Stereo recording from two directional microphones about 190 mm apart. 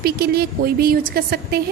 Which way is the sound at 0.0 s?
55° right (ahead or behind).